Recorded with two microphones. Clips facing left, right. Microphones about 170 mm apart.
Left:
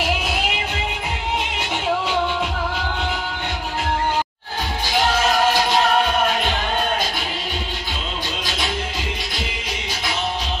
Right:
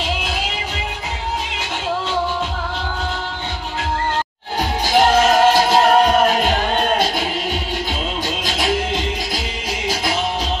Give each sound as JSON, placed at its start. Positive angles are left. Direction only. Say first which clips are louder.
{"t": 0.0, "sound": "music", "louder": "left 1 dB", "side_deg": 5}
{"t": 4.8, "sound": "music", "louder": "right 6 dB", "side_deg": -45}
{"t": 8.5, "sound": "music", "louder": "right 7 dB", "side_deg": -45}